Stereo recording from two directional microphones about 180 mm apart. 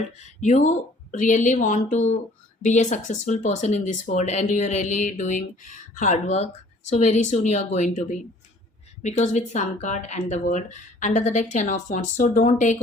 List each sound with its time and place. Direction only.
0.2 s a woman's voice: 40° left (ahead or behind)